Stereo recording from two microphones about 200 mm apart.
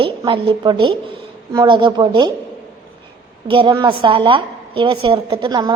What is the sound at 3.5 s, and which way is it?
A woman's voice, 25° right (ahead or behind).